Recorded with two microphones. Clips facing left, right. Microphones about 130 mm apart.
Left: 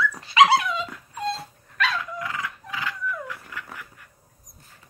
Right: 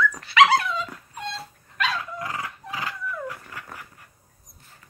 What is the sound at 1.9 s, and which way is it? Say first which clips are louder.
Dog: even; 35° right (ahead or behind).